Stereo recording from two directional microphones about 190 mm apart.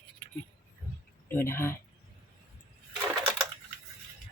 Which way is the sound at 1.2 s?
10° left (ahead or behind).